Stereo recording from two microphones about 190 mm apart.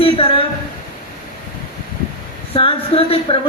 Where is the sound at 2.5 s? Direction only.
30° left (ahead or behind).